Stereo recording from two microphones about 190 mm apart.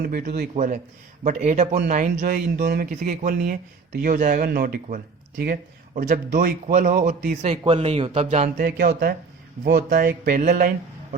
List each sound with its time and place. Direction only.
0.0 s speech: 50° right (ahead or behind)
0.5 s speech: 40° right (ahead or behind)
2.9 s a man's voice: 40° right (ahead or behind)
8.6 s speech: 55° right (ahead or behind)